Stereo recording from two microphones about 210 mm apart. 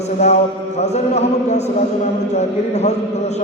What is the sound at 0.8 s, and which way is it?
Music, 30° left (ahead or behind).